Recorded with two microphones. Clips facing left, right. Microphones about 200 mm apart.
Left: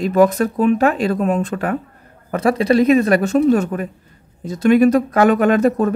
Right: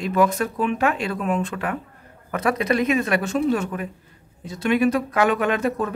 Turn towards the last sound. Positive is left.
turn(degrees=40)  # may be behind; listen again after turning